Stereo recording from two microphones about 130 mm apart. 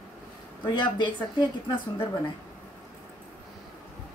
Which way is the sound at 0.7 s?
35° left (ahead or behind).